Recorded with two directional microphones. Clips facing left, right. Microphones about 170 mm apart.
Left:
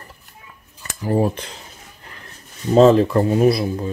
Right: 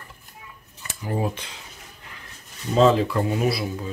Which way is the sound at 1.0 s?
40° left (ahead or behind).